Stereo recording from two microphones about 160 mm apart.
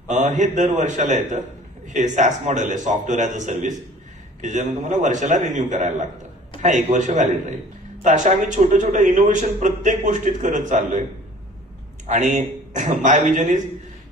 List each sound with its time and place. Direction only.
0.1 s a man's voice: 50° right (ahead or behind)
12.1 s a man's voice: 50° right (ahead or behind)